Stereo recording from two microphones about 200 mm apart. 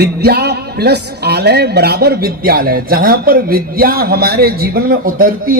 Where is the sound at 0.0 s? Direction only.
55° right (ahead or behind).